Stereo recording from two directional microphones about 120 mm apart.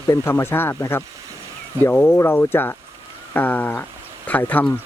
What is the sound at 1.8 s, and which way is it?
Speech, 15° left (ahead or behind).